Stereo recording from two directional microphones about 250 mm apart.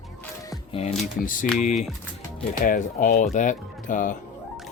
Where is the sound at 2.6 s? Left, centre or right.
Left.